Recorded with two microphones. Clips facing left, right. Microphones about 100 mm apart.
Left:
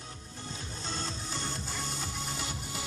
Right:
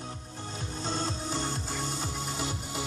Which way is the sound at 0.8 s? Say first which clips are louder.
Right 6 dB; 45° right (ahead or behind).